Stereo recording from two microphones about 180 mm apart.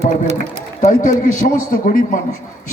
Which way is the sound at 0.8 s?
45° left (ahead or behind).